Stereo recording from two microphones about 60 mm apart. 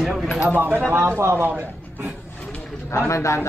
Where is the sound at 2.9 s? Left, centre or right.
Left.